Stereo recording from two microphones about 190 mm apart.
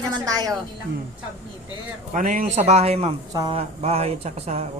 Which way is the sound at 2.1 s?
45° right (ahead or behind).